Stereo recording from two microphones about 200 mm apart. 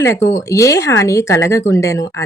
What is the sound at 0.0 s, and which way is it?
A woman's voice, 15° left (ahead or behind).